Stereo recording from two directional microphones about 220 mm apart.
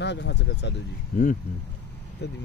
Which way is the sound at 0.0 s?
50° left (ahead or behind).